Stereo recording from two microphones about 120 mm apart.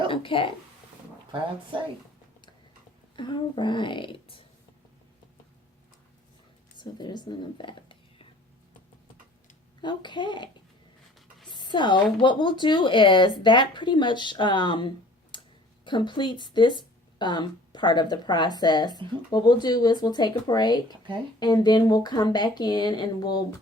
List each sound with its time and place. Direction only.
0.1 s a woman's voice: 45° left (ahead or behind)
3.2 s a woman's voice: 40° left (ahead or behind)
6.7 s speech: 40° left (ahead or behind)
9.8 s speech: 40° left (ahead or behind)
11.4 s a sound: 40° left (ahead or behind)
12.2 s speech: 40° left (ahead or behind)